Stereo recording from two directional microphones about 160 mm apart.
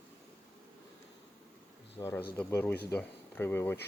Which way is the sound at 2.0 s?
25° left (ahead or behind).